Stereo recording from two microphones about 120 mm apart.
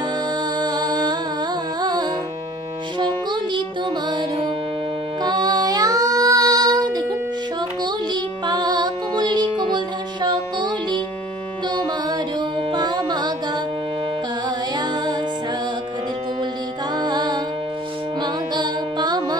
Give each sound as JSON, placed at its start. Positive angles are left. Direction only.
{"t": 0.6, "sound": "music", "side_deg": -35}
{"t": 16.9, "sound": "music", "side_deg": -35}